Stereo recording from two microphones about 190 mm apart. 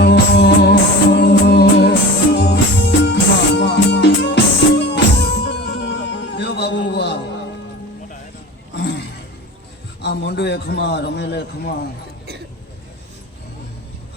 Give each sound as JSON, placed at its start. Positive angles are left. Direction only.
{"t": 0.0, "sound": "music", "side_deg": 60}
{"t": 8.7, "sound": "a sound", "side_deg": 60}
{"t": 10.0, "sound": "a man's voice", "side_deg": 60}